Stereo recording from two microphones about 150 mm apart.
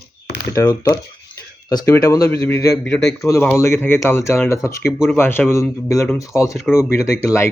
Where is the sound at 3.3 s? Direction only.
15° left (ahead or behind).